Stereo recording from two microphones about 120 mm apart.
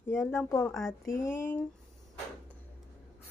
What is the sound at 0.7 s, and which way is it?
Speech, centre (ahead or behind).